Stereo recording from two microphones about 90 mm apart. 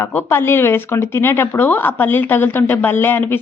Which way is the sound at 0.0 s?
25° left (ahead or behind).